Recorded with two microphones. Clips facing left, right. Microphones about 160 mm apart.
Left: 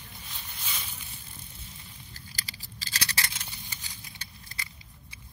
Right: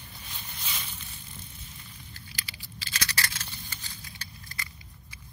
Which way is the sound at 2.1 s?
40° left (ahead or behind).